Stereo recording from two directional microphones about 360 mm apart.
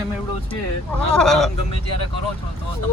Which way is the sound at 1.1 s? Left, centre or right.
Centre.